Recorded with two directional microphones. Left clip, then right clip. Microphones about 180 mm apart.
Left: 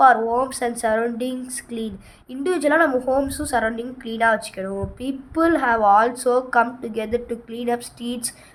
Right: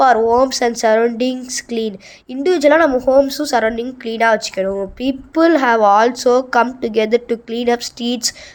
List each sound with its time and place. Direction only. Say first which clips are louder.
0.0 s a woman's voice: right 4 dB; 30° right (ahead or behind)